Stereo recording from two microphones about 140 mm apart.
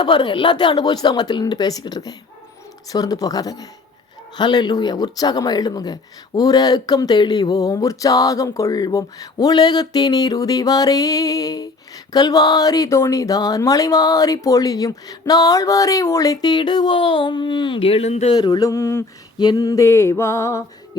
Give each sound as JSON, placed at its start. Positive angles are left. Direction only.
{"t": 0.0, "sound": "speech", "side_deg": 35}
{"t": 18.3, "sound": "speech", "side_deg": 30}